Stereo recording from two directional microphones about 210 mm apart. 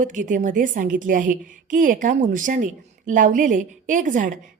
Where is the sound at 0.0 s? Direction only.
40° right (ahead or behind).